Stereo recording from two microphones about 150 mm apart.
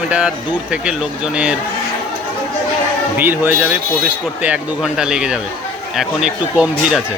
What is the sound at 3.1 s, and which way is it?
Speech, 15° right (ahead or behind).